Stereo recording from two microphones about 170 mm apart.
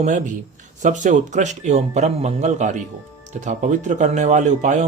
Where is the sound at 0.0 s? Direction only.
45° right (ahead or behind).